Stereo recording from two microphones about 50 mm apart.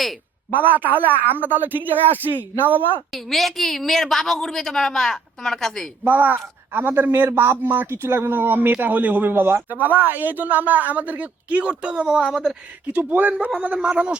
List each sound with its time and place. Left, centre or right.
0.5 s a man's voice: right
3.2 s a woman's voice: centre
6.1 s a man's voice: right
9.7 s a man's voice: right; by 12.5 s centre
12.9 s a man's voice: right
13.6 s speech: right